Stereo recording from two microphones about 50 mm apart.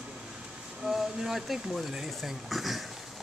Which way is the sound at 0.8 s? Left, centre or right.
Centre.